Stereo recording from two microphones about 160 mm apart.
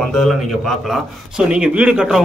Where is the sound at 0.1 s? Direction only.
Centre (ahead or behind).